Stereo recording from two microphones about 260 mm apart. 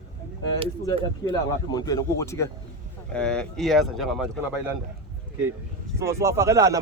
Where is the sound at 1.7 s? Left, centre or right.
Centre.